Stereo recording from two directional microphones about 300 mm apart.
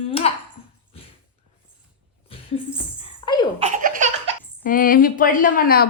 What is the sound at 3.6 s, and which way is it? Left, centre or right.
Laughter, right.